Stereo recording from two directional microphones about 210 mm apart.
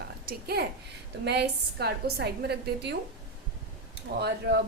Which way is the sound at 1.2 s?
50° right (ahead or behind).